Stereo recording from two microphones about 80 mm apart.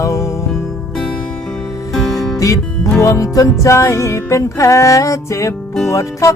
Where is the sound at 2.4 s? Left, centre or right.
Left.